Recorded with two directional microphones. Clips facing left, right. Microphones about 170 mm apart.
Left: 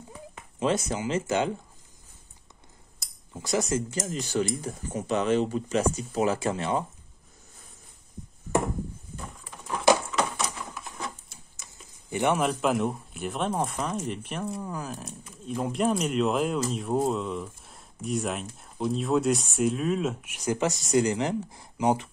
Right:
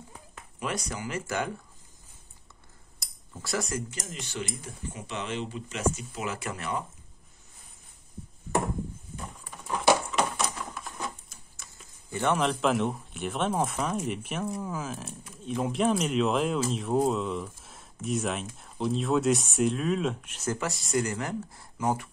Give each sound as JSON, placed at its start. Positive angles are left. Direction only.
{"t": 0.6, "sound": "speech", "side_deg": 25}
{"t": 3.3, "sound": "speech", "side_deg": 20}
{"t": 4.1, "sound": "speech", "side_deg": 40}
{"t": 9.7, "sound": "patter", "side_deg": -5}
{"t": 11.5, "sound": "speech", "side_deg": 20}